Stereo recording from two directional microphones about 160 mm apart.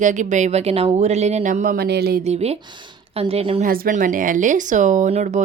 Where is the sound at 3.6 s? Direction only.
65° right (ahead or behind); by 5.4 s 45° right (ahead or behind).